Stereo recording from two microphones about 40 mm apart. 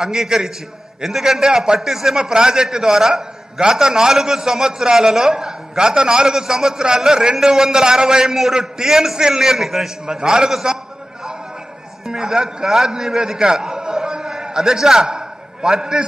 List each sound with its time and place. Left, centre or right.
0.0 s a man's voice: centre
12.1 s a man's voice: centre
15.0 s a sound: centre